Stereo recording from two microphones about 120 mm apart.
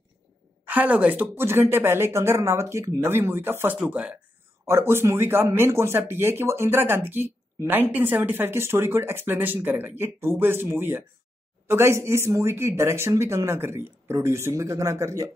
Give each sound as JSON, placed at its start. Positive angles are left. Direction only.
{"t": 0.7, "sound": "speech", "side_deg": -10}